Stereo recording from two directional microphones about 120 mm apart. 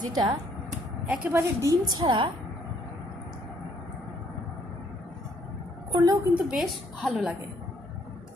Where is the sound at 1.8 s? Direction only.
35° right (ahead or behind).